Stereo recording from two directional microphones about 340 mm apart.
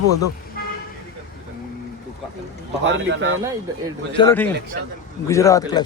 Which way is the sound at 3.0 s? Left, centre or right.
Right.